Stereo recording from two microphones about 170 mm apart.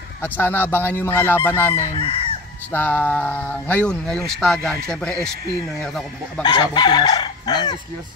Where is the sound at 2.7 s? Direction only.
10° left (ahead or behind).